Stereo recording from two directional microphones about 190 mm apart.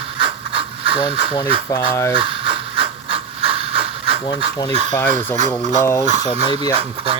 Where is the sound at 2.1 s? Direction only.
25° right (ahead or behind).